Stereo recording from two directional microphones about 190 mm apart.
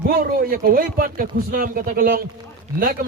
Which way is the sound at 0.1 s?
50° right (ahead or behind).